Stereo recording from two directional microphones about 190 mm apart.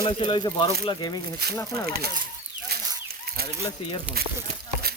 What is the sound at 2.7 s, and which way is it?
Chicken, 55° right (ahead or behind).